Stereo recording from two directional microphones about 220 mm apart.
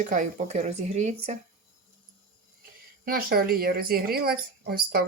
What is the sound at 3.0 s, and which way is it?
A woman's voice, 45° right (ahead or behind).